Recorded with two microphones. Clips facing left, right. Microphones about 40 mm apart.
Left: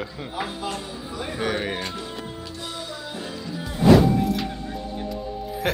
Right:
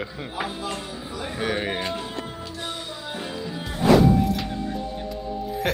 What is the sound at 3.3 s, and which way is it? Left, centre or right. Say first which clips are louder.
Music: right 1 dB; centre.